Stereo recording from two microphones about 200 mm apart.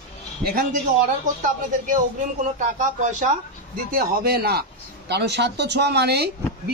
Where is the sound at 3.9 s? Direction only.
50° right (ahead or behind).